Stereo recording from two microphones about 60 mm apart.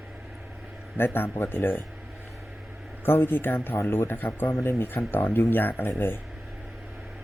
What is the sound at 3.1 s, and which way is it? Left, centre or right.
Speech, left.